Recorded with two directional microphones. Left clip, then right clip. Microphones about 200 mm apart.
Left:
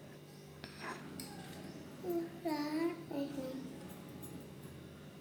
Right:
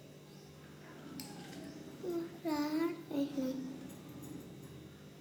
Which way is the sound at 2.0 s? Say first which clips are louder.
Even; 35° right (ahead or behind).